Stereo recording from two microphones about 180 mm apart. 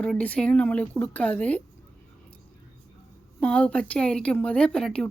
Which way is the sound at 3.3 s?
5° left (ahead or behind).